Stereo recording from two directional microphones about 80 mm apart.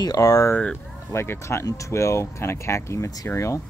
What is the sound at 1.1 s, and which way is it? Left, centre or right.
Speech, left.